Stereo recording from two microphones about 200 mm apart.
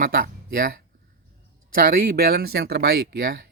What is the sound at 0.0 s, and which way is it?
Speech, 45° right (ahead or behind).